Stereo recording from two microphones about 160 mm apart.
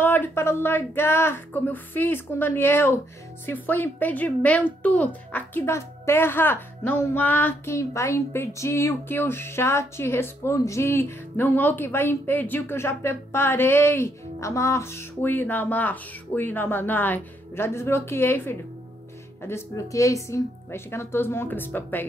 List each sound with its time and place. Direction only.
0.0 s speech: 10° left (ahead or behind)